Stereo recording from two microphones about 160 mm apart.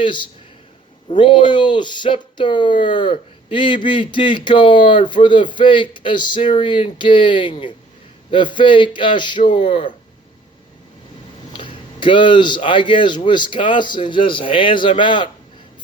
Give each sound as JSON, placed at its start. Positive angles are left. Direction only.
{"t": 0.0, "sound": "speech", "side_deg": 30}
{"t": 11.5, "sound": "speech", "side_deg": 30}